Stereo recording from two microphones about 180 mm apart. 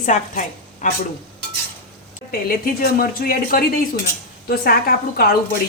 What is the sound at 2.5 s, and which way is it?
Speech, 55° left (ahead or behind).